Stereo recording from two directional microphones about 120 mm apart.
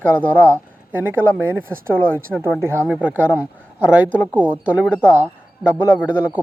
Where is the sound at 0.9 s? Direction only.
15° right (ahead or behind).